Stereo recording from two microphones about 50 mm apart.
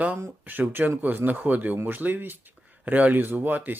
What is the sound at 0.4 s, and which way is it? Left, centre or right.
Speech, right.